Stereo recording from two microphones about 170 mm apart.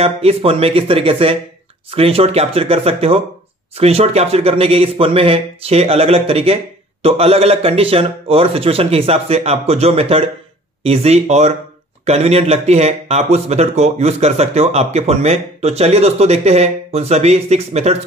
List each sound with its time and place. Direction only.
0.0 s speech: 35° right (ahead or behind)